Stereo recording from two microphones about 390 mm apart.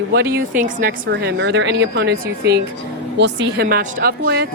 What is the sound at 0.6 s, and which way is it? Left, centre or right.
A woman's voice, right.